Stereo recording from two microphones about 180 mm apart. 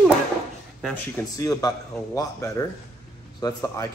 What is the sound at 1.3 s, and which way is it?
Speech, 20° left (ahead or behind).